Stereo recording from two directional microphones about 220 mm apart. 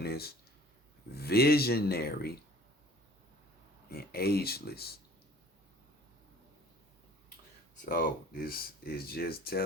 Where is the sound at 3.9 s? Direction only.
45° left (ahead or behind).